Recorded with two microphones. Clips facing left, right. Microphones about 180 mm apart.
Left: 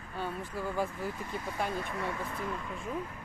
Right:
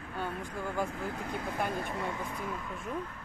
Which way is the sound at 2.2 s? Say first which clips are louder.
Left 1 dB; centre (ahead or behind).